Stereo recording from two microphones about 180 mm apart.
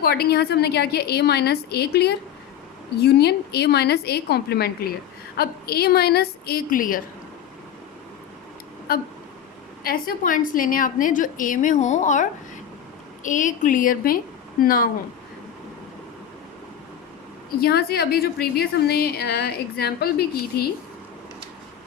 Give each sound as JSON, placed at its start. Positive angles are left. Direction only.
{"t": 0.0, "sound": "a woman's voice", "side_deg": 60}
{"t": 8.9, "sound": "a woman's voice", "side_deg": 55}
{"t": 17.6, "sound": "a woman's voice", "side_deg": 60}